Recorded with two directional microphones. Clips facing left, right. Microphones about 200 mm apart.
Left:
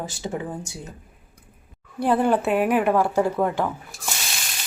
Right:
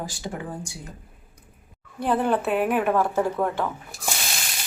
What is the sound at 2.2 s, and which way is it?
Speech, 10° left (ahead or behind).